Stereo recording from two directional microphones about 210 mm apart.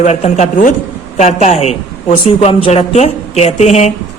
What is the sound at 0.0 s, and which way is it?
A woman's voice, 35° left (ahead or behind).